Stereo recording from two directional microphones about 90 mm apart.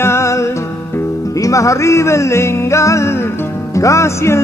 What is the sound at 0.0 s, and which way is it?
Music, 30° left (ahead or behind).